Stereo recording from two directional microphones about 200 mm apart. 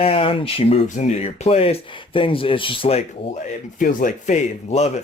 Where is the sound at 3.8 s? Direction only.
40° left (ahead or behind).